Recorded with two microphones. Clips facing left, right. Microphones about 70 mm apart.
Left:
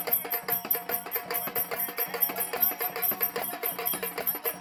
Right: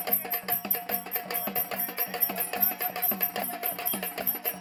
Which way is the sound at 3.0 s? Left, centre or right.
Left.